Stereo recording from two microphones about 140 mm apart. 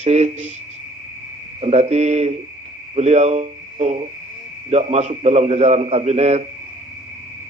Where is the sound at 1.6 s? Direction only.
50° right (ahead or behind).